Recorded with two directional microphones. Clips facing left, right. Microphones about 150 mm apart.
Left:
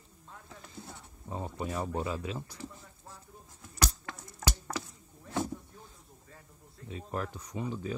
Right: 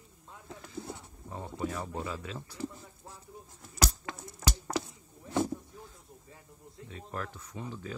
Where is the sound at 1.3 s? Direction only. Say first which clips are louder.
Even; 20° left (ahead or behind).